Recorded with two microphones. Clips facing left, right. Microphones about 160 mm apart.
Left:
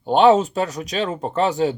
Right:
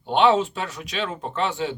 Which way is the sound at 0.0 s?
40° left (ahead or behind).